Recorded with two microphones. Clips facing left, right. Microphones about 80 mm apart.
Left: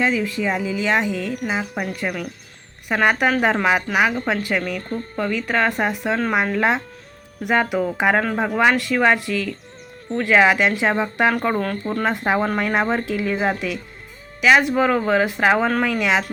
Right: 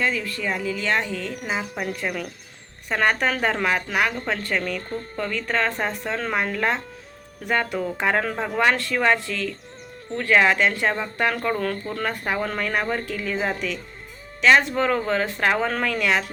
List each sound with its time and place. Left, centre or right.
0.0 s speech: centre